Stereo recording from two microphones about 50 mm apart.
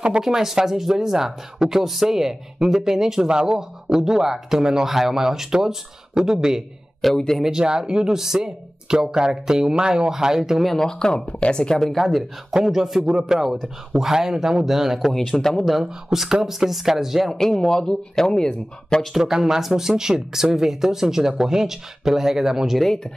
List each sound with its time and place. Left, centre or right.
0.2 s speech: centre
7.2 s speech: centre
7.4 s speech: centre
10.6 s speech: centre
11.8 s speech: centre
15.1 s speech: centre
15.6 s speech: centre
17.4 s speech: centre
19.1 s speech: centre